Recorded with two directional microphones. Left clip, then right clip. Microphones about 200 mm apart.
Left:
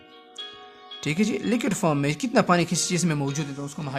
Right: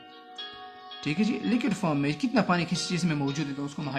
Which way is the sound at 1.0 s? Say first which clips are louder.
Left 3 dB; 55° left (ahead or behind).